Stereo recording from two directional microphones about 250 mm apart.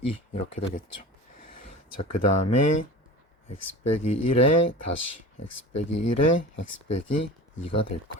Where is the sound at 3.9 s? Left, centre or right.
Left.